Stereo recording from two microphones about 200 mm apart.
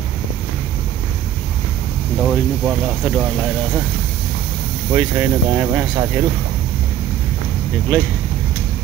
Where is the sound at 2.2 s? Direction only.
5° right (ahead or behind).